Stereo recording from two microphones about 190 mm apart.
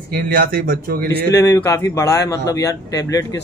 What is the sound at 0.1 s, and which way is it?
Speech, 50° right (ahead or behind).